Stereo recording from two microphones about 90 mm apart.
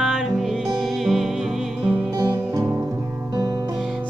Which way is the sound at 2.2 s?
45° right (ahead or behind).